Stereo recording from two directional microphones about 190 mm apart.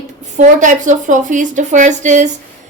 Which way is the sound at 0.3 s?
40° right (ahead or behind).